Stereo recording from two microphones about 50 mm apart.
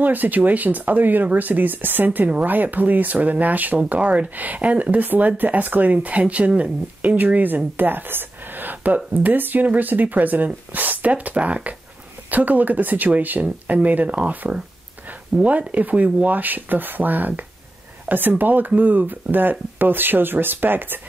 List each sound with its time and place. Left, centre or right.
0.0 s speech: right